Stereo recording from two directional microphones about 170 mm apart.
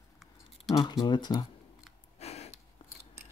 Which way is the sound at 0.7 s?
25° left (ahead or behind).